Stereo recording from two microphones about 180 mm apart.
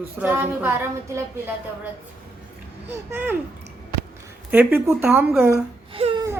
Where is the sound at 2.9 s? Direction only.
10° right (ahead or behind).